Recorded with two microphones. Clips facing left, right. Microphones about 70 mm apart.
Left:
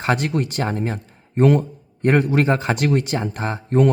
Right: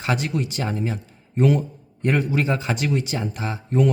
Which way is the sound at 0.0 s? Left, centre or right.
Left.